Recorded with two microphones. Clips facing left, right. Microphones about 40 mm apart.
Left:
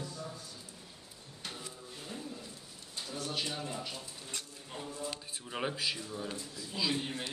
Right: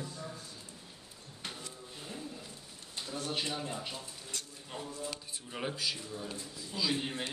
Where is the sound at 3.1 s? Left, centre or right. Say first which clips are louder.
Right 1 dB; right.